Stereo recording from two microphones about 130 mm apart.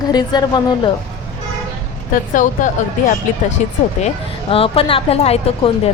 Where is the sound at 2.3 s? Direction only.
85° left.